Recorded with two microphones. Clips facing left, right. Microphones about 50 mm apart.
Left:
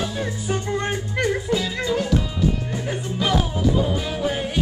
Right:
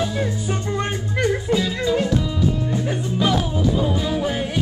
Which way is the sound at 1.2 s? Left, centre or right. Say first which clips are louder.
Right 3 dB; right.